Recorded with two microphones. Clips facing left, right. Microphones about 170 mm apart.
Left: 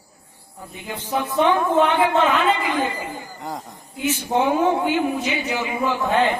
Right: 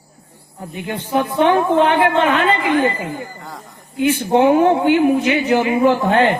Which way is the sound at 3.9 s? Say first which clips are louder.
Right 7 dB; 65° right (ahead or behind).